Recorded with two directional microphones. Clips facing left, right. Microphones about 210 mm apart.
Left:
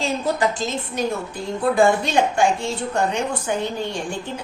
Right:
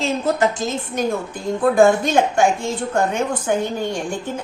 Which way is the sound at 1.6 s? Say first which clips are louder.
Right 3 dB; 50° right (ahead or behind).